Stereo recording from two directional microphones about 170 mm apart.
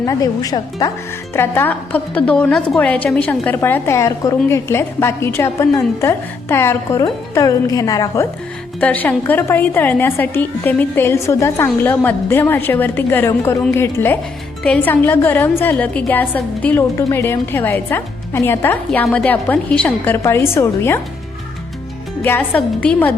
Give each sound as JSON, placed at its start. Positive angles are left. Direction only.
{"t": 0.0, "sound": "a woman's voice", "side_deg": 20}
{"t": 8.8, "sound": "a woman's voice", "side_deg": 10}
{"t": 22.2, "sound": "a woman's voice", "side_deg": 10}